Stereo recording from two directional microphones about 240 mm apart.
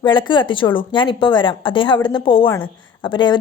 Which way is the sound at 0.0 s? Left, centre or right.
Centre.